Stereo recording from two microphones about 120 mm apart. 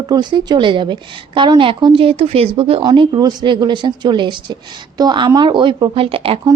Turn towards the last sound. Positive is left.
turn(degrees=-50)  # may be behind; listen again after turning